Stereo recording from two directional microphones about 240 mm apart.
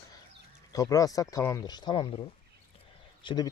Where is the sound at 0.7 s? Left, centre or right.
Centre.